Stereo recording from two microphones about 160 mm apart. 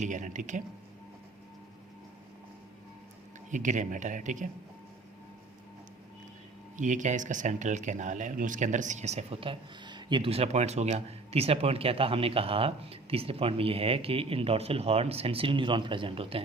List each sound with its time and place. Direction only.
0.0 s speech: 50° right (ahead or behind)
3.5 s speech: 50° right (ahead or behind)
6.7 s speech: 50° right (ahead or behind); by 16.4 s 35° right (ahead or behind)